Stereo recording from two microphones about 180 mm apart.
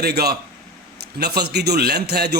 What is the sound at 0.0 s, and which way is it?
A man's voice, 60° right (ahead or behind).